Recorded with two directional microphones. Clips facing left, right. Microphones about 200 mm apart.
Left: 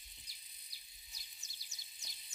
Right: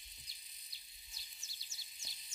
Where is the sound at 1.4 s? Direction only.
15° left (ahead or behind).